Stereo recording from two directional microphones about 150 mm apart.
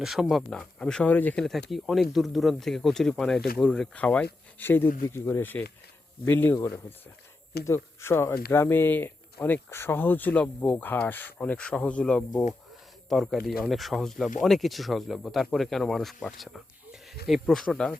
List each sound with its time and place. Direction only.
0.0 s speech: centre (ahead or behind)